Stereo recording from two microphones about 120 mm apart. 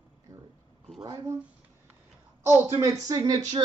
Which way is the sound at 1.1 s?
25° right (ahead or behind).